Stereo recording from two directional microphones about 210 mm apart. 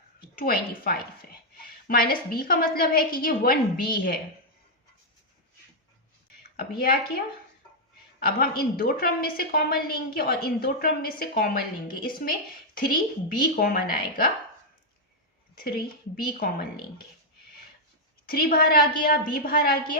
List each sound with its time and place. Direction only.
0.2 s a woman's voice: 45° left (ahead or behind)
6.6 s a woman's voice: 45° left (ahead or behind)
8.2 s a woman's voice: 45° left (ahead or behind)
15.5 s a woman's voice: 45° left (ahead or behind)
18.3 s a woman's voice: 45° left (ahead or behind)